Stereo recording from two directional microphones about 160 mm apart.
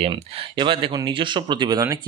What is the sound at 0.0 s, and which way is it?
Speech, 30° right (ahead or behind).